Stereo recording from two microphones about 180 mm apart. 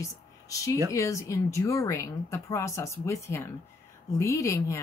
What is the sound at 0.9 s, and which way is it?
Speech, 15° left (ahead or behind).